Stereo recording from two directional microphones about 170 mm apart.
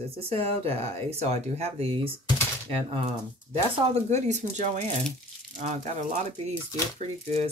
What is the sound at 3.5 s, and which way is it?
Speech, 40° right (ahead or behind).